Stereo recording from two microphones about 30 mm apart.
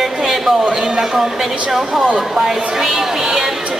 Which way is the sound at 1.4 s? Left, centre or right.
Centre.